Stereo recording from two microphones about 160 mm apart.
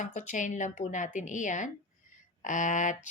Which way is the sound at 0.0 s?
50° left (ahead or behind).